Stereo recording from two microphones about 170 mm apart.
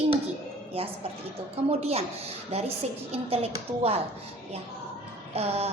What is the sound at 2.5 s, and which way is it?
A woman's voice, 35° right (ahead or behind).